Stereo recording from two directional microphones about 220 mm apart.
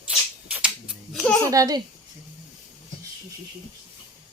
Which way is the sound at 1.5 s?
15° right (ahead or behind).